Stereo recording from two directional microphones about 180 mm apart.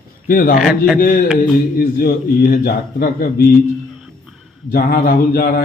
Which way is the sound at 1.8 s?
60° left (ahead or behind).